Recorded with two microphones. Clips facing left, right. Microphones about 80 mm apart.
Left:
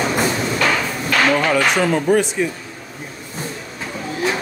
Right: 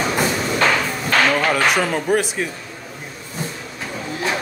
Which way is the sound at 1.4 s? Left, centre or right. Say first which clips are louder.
Left 1 dB; centre.